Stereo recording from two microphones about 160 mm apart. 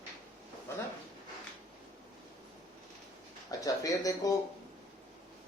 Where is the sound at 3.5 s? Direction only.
20° left (ahead or behind).